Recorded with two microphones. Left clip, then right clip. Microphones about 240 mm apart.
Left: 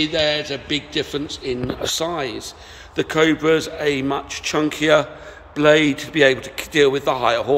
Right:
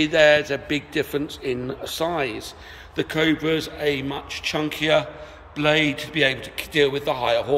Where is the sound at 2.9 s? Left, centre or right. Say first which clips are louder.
Left 4 dB; centre.